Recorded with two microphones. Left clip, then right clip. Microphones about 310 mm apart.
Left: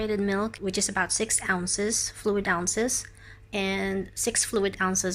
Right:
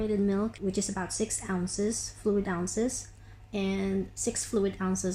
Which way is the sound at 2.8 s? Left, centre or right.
Left.